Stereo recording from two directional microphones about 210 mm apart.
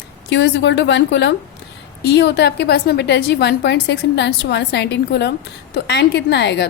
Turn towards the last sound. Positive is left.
turn(degrees=55)  # may be behind; listen again after turning